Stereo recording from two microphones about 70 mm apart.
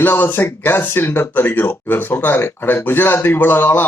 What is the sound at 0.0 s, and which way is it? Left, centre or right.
Speech, left.